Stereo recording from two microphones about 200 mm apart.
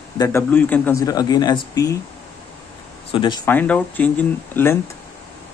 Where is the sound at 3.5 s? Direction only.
10° left (ahead or behind).